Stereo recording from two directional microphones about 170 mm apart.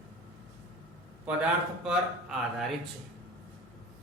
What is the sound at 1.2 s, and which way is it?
Speech, 5° right (ahead or behind).